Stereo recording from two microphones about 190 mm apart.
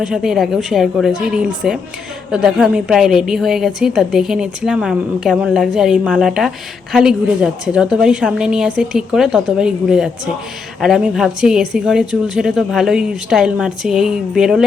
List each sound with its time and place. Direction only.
0.0 s a woman's voice: 5° right (ahead or behind)